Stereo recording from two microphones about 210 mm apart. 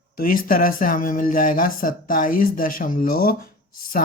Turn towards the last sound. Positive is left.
turn(degrees=45)  # may be behind; listen again after turning